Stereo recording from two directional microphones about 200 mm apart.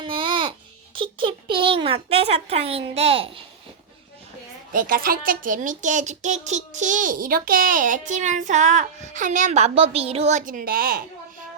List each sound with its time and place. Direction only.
0.0 s babbling: 25° right (ahead or behind)
0.9 s a child's voice: 25° right (ahead or behind)
4.7 s speech: 45° right (ahead or behind)